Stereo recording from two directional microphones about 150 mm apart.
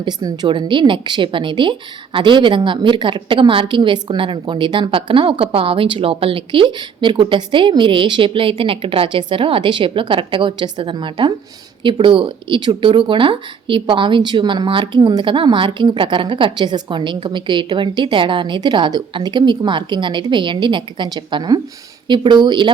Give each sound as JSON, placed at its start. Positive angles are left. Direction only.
{"t": 0.0, "sound": "speech", "side_deg": -25}